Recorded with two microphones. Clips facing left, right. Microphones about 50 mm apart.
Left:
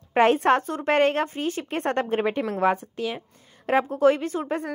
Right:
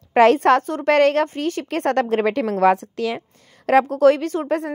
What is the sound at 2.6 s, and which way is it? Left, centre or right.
A woman's voice, right.